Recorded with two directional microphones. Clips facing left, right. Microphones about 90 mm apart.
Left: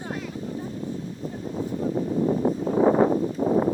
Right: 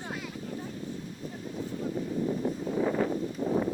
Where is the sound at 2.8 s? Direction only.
45° left (ahead or behind).